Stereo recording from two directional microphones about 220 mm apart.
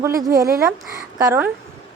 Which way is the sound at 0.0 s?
15° right (ahead or behind).